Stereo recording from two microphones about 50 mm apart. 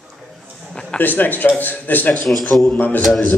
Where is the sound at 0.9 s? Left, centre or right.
Left.